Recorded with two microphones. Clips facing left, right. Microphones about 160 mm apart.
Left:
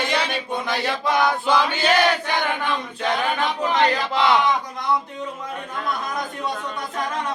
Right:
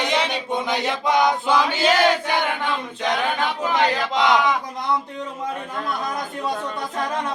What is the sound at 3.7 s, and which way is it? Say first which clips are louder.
Battle cry: even; 15° right (ahead or behind).